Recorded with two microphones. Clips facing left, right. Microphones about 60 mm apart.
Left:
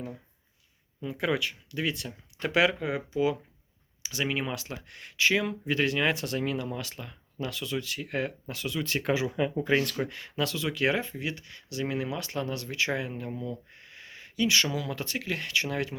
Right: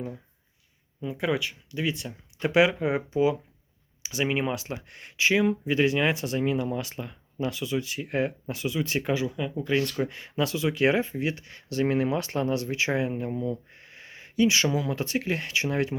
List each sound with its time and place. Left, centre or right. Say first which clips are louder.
1.0 s speech: right 1 dB; centre
2.4 s speech: right 4 dB; centre
2.9 s speech: right 4 dB; right
9.1 s speech: left 1 dB; centre
9.8 s speech: right 3 dB; centre
10.1 s speech: right 3 dB; centre